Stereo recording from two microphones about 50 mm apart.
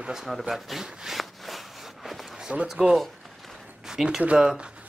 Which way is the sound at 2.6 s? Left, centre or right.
Centre.